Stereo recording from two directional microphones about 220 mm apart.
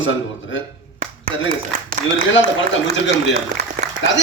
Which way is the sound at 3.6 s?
50° right (ahead or behind).